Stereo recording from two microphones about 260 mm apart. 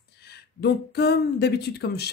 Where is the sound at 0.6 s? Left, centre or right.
Left.